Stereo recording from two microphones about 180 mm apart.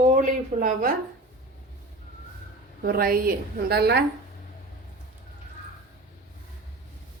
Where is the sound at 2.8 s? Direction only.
55° right (ahead or behind).